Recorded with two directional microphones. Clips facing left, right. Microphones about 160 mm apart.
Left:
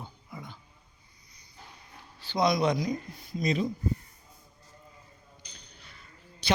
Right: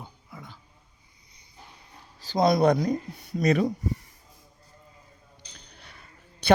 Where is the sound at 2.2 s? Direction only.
45° right (ahead or behind).